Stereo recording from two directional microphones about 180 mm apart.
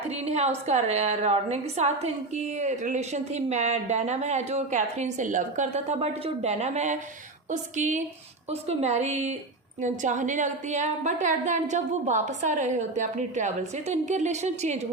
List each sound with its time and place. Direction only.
0.3 s a woman's voice: 35° right (ahead or behind)